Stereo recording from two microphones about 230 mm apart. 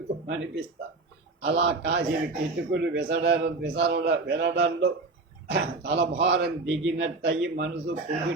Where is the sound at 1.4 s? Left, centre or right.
Right.